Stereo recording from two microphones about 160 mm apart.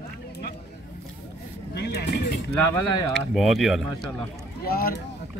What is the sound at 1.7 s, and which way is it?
Vehicle, 90° left.